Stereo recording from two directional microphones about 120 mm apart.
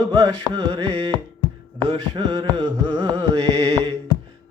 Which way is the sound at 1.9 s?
40° right (ahead or behind).